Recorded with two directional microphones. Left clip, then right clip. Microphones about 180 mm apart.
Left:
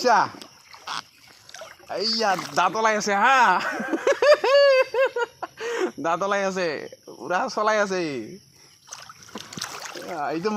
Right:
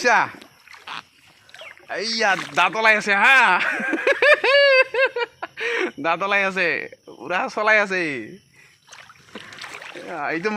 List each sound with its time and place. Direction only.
0.0 s speech: 20° right (ahead or behind)
0.3 s rowboat: 5° right (ahead or behind)
1.9 s speech: 25° right (ahead or behind)
3.1 s a sound: 30° right (ahead or behind)
6.6 s speech: 30° right (ahead or behind)
7.3 s speech: 65° right (ahead or behind)
8.9 s rowboat: centre (ahead or behind)
10.1 s speech: 30° right (ahead or behind)